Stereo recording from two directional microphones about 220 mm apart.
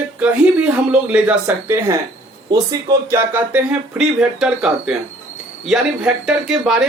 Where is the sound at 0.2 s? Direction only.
5° right (ahead or behind).